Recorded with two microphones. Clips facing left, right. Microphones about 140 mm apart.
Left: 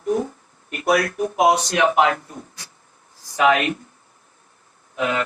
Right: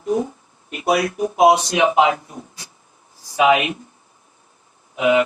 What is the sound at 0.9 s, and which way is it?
Speech, 20° right (ahead or behind).